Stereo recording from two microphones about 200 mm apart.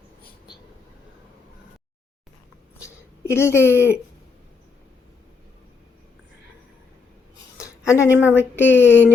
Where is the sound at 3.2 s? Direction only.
10° left (ahead or behind).